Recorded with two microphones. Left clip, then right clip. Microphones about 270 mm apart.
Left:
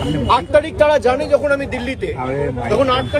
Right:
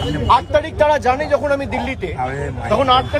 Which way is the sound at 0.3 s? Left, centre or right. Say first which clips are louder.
Even; centre.